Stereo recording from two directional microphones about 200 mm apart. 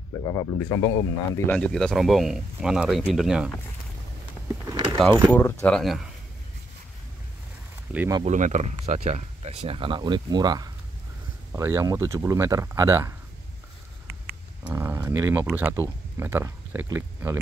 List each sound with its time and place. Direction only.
0.2 s speech: 15° left (ahead or behind); by 3.5 s 5° right (ahead or behind)
4.9 s speech: 5° left (ahead or behind)
8.2 s speech: 35° right (ahead or behind); by 13.1 s 15° right (ahead or behind)
14.7 s speech: 10° right (ahead or behind)